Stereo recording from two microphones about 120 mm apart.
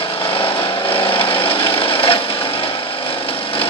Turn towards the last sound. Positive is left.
turn(degrees=50)  # may be behind; listen again after turning